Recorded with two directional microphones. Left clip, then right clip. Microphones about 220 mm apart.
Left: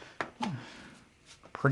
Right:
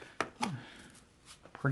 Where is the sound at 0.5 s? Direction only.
20° left (ahead or behind).